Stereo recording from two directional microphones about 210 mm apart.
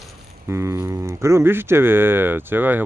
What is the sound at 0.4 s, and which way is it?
Speech, 15° right (ahead or behind).